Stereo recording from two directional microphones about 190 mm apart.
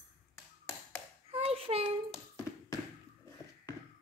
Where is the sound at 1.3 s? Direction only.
30° right (ahead or behind).